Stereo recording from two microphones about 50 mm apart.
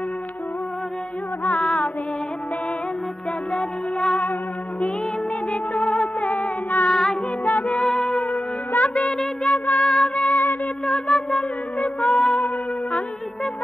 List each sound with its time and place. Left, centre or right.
1.4 s music: left
3.5 s music: centre
5.5 s music: left
6.9 s music: centre
7.4 s music: left
7.7 s music: centre
8.7 s music of bollywood: left
9.4 s music: left
10.3 s music: left
10.9 s a sound: centre
11.8 s music: left